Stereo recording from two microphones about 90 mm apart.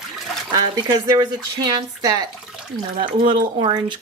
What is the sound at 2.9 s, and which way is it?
Speech, 75° right (ahead or behind).